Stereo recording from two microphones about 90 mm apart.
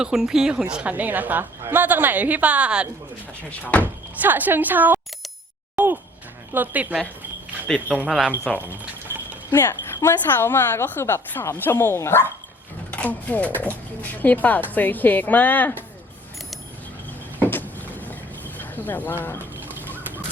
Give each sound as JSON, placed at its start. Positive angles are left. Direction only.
{"t": 0.0, "sound": "a woman's voice", "side_deg": -5}
{"t": 3.5, "sound": "speech", "side_deg": 15}
{"t": 4.2, "sound": "a woman's voice", "side_deg": -20}
{"t": 5.7, "sound": "a sound", "side_deg": -20}
{"t": 6.5, "sound": "a woman's voice", "side_deg": -20}
{"t": 7.9, "sound": "a woman's voice", "side_deg": -15}
{"t": 8.5, "sound": "speech", "side_deg": 10}
{"t": 9.5, "sound": "speech", "side_deg": 30}
{"t": 12.9, "sound": "speech", "side_deg": 15}
{"t": 17.5, "sound": "a sound", "side_deg": 20}
{"t": 19.4, "sound": "a sound", "side_deg": -20}